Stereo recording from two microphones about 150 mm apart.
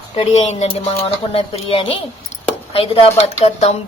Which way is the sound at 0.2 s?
45° left (ahead or behind).